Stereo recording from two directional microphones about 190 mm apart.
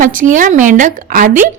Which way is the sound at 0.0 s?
45° right (ahead or behind).